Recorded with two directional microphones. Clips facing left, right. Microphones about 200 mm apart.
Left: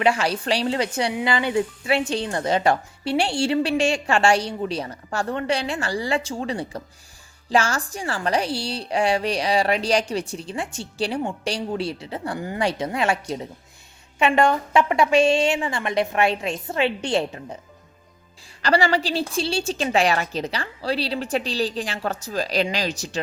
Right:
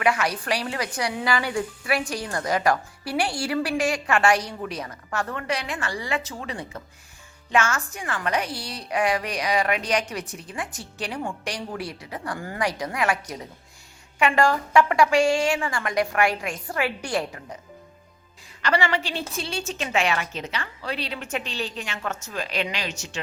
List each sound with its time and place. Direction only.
0.0 s a woman's voice: 30° left (ahead or behind)
18.6 s a woman's voice: 35° left (ahead or behind)